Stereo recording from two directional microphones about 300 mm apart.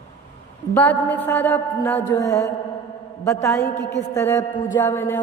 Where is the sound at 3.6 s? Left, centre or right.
Left.